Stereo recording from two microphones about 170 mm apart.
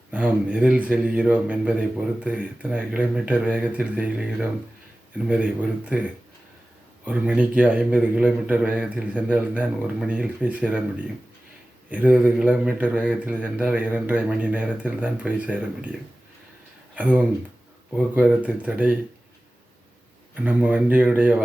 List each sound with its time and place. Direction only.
0.1 s a man's voice: 10° right (ahead or behind)
20.3 s a man's voice: 10° right (ahead or behind)